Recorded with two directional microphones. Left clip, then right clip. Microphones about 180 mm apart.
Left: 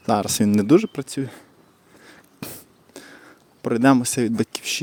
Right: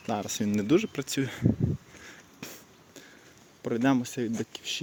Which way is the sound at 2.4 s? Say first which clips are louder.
Left 8 dB; 45° left (ahead or behind).